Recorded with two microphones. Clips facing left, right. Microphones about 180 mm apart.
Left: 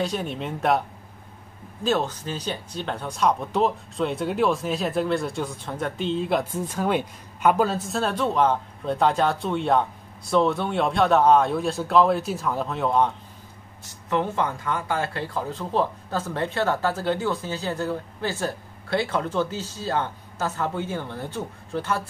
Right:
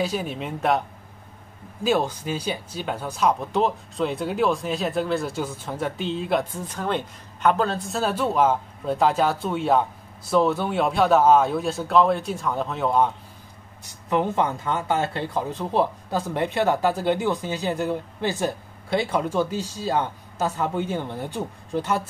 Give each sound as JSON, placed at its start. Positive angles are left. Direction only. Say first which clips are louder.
{"t": 0.0, "sound": "speech", "louder": "right 1 dB", "side_deg": -5}
{"t": 1.8, "sound": "speech", "louder": "right 2 dB", "side_deg": -10}
{"t": 13.8, "sound": "speech", "louder": "right 2 dB", "side_deg": -15}